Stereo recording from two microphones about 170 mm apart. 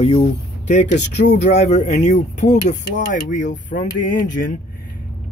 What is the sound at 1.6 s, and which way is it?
Speech, 40° left (ahead or behind).